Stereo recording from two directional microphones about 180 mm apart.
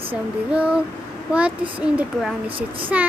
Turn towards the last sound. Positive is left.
turn(degrees=-5)  # may be behind; listen again after turning